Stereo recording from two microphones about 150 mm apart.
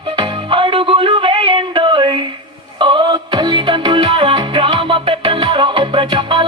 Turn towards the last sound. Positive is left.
turn(degrees=-35)  # may be behind; listen again after turning